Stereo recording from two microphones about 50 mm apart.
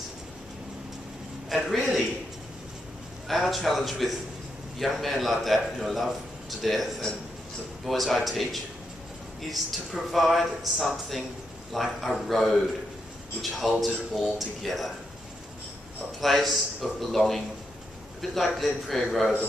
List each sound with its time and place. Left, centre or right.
1.5 s speech: centre
3.3 s speech: centre
16.2 s speech: centre